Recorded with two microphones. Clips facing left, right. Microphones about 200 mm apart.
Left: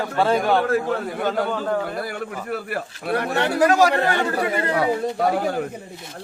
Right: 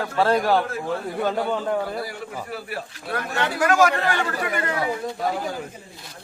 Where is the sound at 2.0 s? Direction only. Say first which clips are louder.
Left 3 dB; 60° left (ahead or behind).